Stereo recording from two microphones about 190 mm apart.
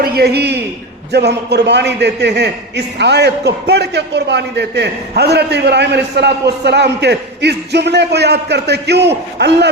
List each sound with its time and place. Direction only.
0.0 s a man's voice: 55° right (ahead or behind)